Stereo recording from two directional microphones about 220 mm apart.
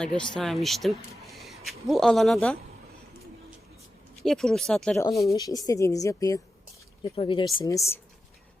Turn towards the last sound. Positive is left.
turn(degrees=15)  # may be behind; listen again after turning